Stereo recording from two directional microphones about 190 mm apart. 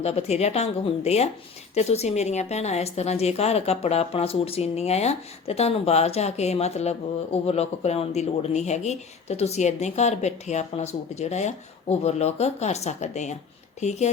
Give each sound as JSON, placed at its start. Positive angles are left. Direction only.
{"t": 0.0, "sound": "speech", "side_deg": 35}